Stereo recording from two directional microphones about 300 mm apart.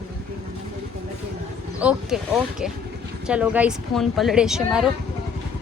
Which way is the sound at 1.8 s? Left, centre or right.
Centre.